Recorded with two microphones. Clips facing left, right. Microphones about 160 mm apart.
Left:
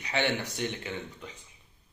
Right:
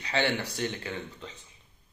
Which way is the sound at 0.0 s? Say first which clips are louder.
Right 1 dB; 20° left (ahead or behind).